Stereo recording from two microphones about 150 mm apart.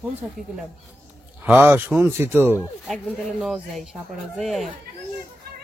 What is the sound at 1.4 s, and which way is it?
Speech, 10° right (ahead or behind).